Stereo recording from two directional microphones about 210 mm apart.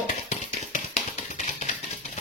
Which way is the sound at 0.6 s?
35° left (ahead or behind).